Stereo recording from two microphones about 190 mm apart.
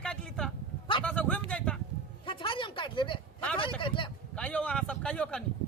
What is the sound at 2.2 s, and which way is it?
Speech, 25° left (ahead or behind).